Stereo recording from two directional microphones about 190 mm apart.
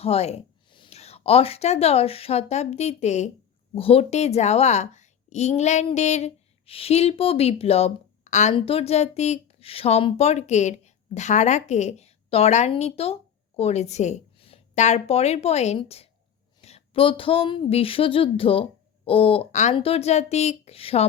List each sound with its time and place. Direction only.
0.0 s a woman's voice: 30° left (ahead or behind)
16.6 s a sound: 35° left (ahead or behind)
19.7 s a woman's voice: 30° left (ahead or behind)